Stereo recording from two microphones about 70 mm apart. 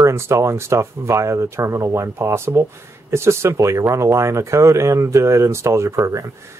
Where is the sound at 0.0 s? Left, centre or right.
Right.